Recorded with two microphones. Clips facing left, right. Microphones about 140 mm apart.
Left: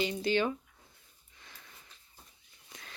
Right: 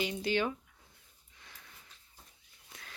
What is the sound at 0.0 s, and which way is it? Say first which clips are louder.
Speech: left 2 dB; 10° right (ahead or behind).